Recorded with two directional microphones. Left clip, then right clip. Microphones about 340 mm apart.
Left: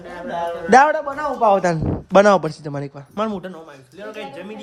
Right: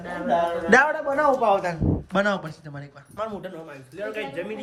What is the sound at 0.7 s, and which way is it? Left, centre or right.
A man's voice, centre.